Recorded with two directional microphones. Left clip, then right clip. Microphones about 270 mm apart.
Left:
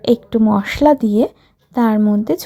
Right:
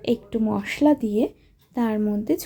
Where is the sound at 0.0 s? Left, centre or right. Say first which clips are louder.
Left 9 dB; centre.